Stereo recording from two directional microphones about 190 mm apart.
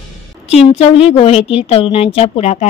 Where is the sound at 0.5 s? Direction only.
35° left (ahead or behind).